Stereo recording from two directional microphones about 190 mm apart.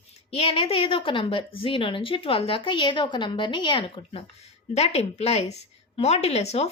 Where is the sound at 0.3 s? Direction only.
30° left (ahead or behind).